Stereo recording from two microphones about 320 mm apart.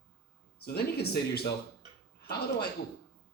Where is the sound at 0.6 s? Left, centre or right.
Left.